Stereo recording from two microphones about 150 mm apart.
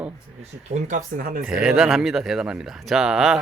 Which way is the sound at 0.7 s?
55° right (ahead or behind).